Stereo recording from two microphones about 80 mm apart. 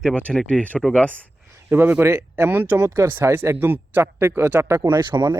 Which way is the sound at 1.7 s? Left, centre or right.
Right.